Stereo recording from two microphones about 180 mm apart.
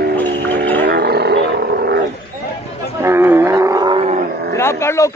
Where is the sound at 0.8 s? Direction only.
65° right (ahead or behind).